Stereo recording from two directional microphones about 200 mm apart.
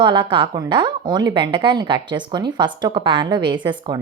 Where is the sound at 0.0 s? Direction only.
20° right (ahead or behind).